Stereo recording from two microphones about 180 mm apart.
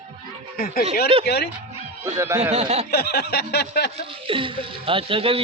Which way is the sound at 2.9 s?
60° left (ahead or behind).